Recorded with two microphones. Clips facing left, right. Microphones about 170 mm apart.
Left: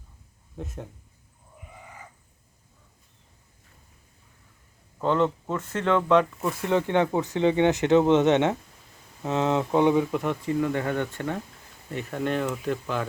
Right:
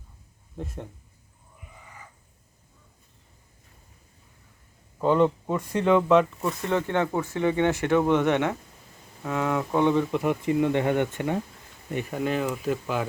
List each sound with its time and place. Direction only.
0.5 s speech: centre (ahead or behind)
4.9 s speech: 10° right (ahead or behind)
6.7 s speech: 15° left (ahead or behind)
10.4 s speech: 20° right (ahead or behind)
12.2 s speech: 5° right (ahead or behind)